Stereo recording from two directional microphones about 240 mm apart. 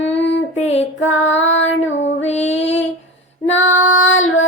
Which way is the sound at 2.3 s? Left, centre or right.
Left.